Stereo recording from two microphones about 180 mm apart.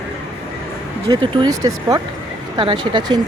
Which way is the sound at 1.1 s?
25° right (ahead or behind).